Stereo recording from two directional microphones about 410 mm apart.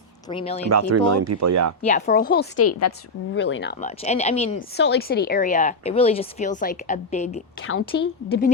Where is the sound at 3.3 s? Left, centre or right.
Left.